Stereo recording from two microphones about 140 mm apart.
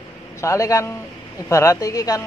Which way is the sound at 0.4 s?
20° left (ahead or behind).